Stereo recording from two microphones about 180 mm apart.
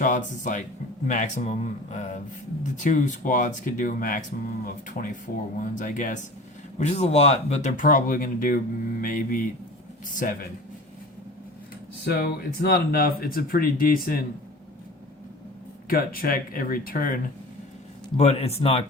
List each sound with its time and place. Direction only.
0.0 s speech: 45° left (ahead or behind)
12.0 s speech: 60° left (ahead or behind)
15.9 s speech: 55° left (ahead or behind)
18.2 s speech: 35° left (ahead or behind)